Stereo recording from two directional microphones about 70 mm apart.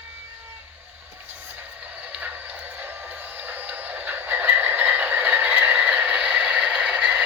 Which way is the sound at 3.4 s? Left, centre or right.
Right.